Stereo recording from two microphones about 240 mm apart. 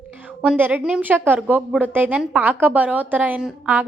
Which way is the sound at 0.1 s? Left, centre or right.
Centre.